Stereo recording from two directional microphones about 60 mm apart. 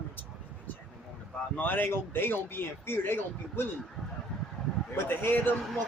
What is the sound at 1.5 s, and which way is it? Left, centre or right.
Speech, left.